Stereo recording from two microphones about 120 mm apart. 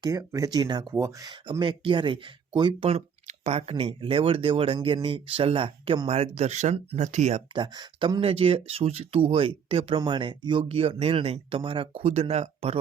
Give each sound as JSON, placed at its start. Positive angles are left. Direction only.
{"t": 0.0, "sound": "speech", "side_deg": -30}
{"t": 0.9, "sound": "speech", "side_deg": -25}
{"t": 1.3, "sound": "speech", "side_deg": -40}
{"t": 3.2, "sound": "a sound", "side_deg": -80}
{"t": 3.7, "sound": "speech", "side_deg": -55}
{"t": 6.1, "sound": "speech", "side_deg": -60}
{"t": 7.5, "sound": "speech", "side_deg": -40}